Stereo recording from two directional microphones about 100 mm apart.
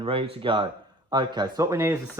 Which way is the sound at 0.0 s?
65° right (ahead or behind).